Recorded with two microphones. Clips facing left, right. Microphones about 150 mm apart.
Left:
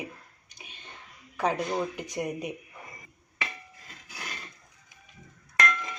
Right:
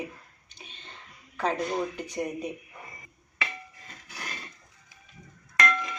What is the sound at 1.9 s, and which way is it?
Speech, 15° left (ahead or behind).